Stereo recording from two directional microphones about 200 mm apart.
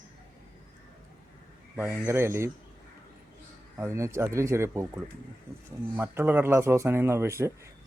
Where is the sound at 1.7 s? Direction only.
10° right (ahead or behind).